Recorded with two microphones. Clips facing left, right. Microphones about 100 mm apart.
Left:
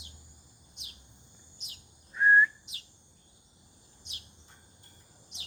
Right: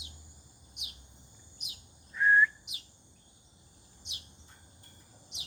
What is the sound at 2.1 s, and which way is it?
Whistling, 25° left (ahead or behind).